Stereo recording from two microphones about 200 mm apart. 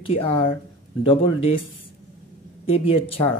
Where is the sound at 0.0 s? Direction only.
25° left (ahead or behind).